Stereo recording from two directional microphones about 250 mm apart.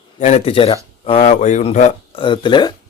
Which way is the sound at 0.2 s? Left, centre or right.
Left.